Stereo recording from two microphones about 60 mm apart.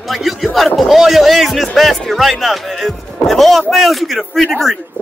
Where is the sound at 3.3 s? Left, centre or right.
Centre.